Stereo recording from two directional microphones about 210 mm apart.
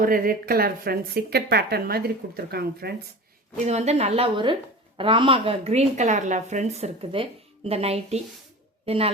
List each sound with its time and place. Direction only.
0.0 s speech: 45° right (ahead or behind)
3.7 s speech: 30° right (ahead or behind)